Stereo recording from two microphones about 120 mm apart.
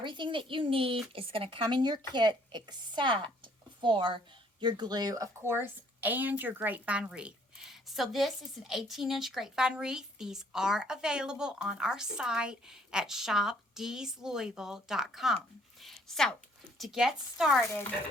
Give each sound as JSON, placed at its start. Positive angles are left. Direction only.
{"t": 0.0, "sound": "a child's voice", "side_deg": -40}
{"t": 15.8, "sound": "a sound", "side_deg": 0}
{"t": 16.7, "sound": "a woman's voice", "side_deg": 0}